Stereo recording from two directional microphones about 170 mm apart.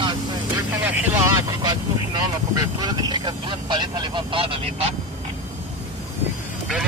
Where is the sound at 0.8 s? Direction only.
15° right (ahead or behind); by 4.9 s 30° right (ahead or behind).